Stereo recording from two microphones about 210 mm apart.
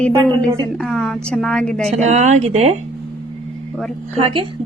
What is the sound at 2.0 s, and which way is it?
Speech, 35° right (ahead or behind).